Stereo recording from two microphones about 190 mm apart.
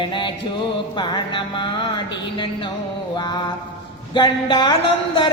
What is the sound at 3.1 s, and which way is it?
Music, 25° left (ahead or behind).